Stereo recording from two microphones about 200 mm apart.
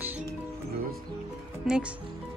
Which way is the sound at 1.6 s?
5° right (ahead or behind).